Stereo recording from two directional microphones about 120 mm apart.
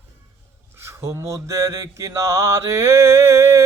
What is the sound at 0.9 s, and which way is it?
Mantra, 25° right (ahead or behind).